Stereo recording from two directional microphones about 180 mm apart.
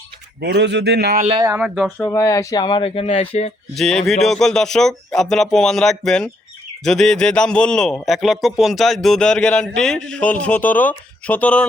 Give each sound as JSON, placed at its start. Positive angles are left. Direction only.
{"t": 0.3, "sound": "a man's voice", "side_deg": -70}
{"t": 1.4, "sound": "speech", "side_deg": -15}
{"t": 2.0, "sound": "speech", "side_deg": 20}
{"t": 3.8, "sound": "a man's voice", "side_deg": 5}